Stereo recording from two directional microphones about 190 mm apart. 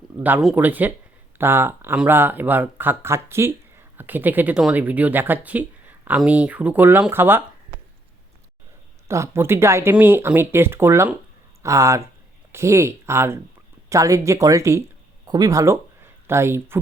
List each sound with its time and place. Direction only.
0.2 s speech: 10° right (ahead or behind)
9.0 s speech: 15° right (ahead or behind)